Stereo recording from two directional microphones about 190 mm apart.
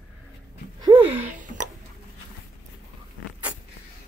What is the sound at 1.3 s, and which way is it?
Speech, 40° right (ahead or behind).